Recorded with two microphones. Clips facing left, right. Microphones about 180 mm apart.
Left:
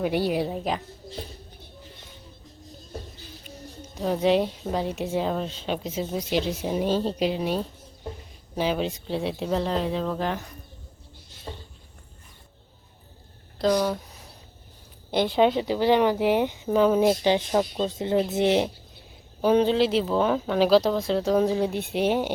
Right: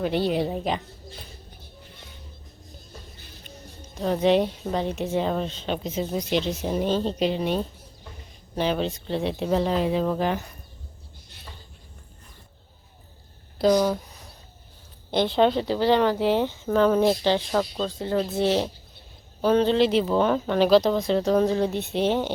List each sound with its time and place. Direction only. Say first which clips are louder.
0.0 s speech: right 1 dB; 10° left (ahead or behind)
3.9 s speech: right 1 dB; 5° left (ahead or behind)
11.5 s a sound: left 9 dB; 25° left (ahead or behind)
13.6 s speech: right 3 dB; 10° right (ahead or behind)
15.1 s speech: even; 10° left (ahead or behind)